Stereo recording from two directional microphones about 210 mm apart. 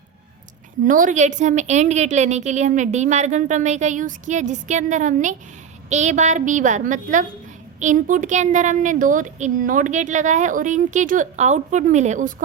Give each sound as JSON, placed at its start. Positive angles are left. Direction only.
{"t": 0.9, "sound": "a woman's voice", "side_deg": -40}